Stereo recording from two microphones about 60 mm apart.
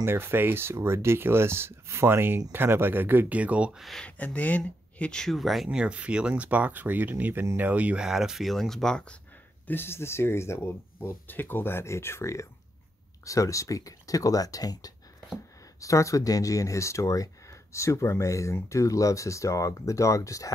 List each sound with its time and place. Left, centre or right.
0.0 s speech: right
4.0 s speech: left
5.1 s speech: centre
5.7 s speech: centre
8.0 s speech: centre
9.7 s speech: left
11.2 s speech: left
15.8 s speech: left